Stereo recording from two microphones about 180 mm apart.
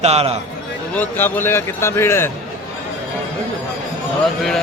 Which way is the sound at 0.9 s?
10° left (ahead or behind).